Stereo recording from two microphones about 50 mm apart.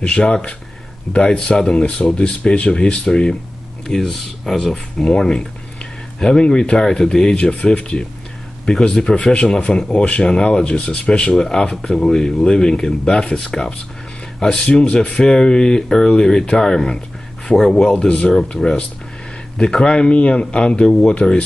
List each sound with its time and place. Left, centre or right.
0.0 s speech: left
3.8 s speech: centre
5.0 s speech: centre
11.3 s speech: centre